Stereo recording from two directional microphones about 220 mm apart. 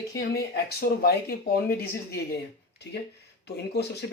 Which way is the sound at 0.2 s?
45° left (ahead or behind).